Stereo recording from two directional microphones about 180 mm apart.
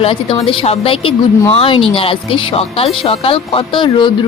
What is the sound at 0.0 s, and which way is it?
Speech, 30° left (ahead or behind).